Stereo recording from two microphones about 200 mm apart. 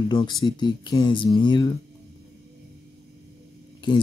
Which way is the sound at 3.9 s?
25° left (ahead or behind).